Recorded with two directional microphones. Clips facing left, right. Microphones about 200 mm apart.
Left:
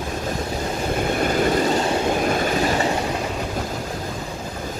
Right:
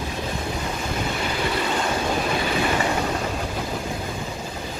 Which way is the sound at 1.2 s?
45° left (ahead or behind).